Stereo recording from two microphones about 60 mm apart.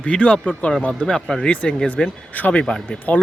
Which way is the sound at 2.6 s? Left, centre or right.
Centre.